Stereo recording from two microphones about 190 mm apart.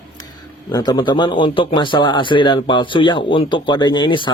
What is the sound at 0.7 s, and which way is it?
Speech, 20° left (ahead or behind).